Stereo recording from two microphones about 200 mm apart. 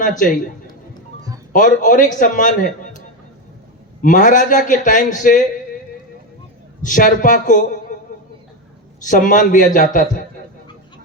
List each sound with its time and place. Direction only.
0.0 s a man's voice: 40° left (ahead or behind)
1.5 s a man's voice: 40° left (ahead or behind)
4.0 s a man's voice: 40° left (ahead or behind)
6.8 s a man's voice: 40° left (ahead or behind)
9.0 s a man's voice: 40° left (ahead or behind)